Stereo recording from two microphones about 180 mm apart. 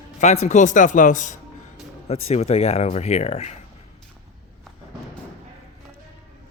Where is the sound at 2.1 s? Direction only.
35° left (ahead or behind).